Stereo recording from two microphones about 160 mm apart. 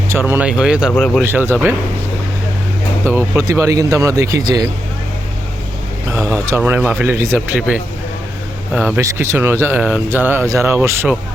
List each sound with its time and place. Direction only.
0.1 s speech: 15° right (ahead or behind); by 1.2 s 5° left (ahead or behind)
1.2 s speech: 15° right (ahead or behind)
3.1 s speech: 15° right (ahead or behind)
6.1 s speech: 15° right (ahead or behind)
9.0 s speech: 15° right (ahead or behind)